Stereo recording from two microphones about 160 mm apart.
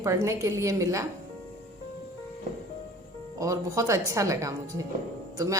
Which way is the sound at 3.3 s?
20° right (ahead or behind).